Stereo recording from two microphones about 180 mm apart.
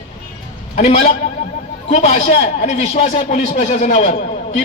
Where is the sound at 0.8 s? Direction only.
35° left (ahead or behind).